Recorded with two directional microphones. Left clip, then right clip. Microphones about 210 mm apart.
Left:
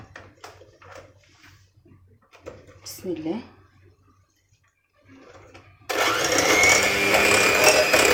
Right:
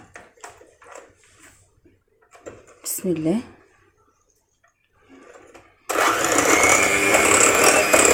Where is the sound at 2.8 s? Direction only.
50° right (ahead or behind).